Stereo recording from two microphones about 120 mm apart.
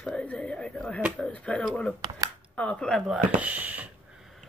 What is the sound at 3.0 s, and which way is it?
Speech, 10° right (ahead or behind).